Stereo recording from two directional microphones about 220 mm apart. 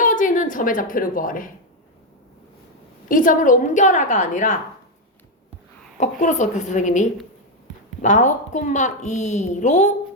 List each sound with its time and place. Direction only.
0.0 s a sound: 35° left (ahead or behind)
3.1 s a woman's voice: 35° left (ahead or behind)
6.0 s a woman's voice: 30° left (ahead or behind)